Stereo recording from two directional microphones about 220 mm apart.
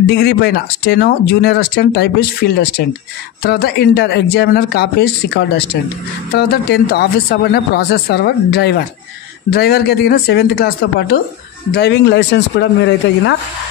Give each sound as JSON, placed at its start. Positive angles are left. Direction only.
{"t": 0.0, "sound": "speech", "side_deg": 45}